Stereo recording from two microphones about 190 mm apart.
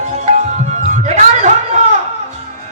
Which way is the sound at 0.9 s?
35° right (ahead or behind).